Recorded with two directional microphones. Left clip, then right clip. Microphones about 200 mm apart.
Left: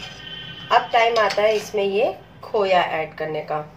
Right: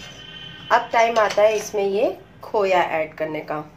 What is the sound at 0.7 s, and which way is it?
Speech, 35° right (ahead or behind).